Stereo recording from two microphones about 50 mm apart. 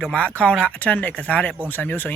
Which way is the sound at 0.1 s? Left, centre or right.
Left.